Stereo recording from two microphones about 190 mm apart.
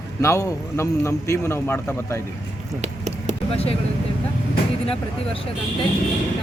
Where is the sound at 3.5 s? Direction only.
30° left (ahead or behind).